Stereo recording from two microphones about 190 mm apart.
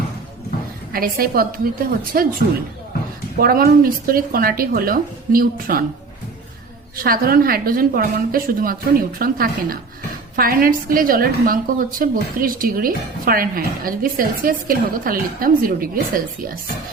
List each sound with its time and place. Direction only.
0.9 s a woman's voice: 50° right (ahead or behind)
3.3 s a woman's voice: 50° right (ahead or behind)
6.9 s a woman's voice: 50° right (ahead or behind)